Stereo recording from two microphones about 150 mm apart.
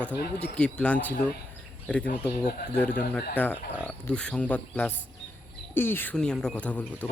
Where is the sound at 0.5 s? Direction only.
5° left (ahead or behind).